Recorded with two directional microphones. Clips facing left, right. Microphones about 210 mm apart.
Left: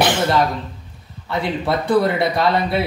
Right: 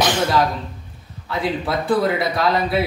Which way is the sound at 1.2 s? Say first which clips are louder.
Left 2 dB; centre (ahead or behind).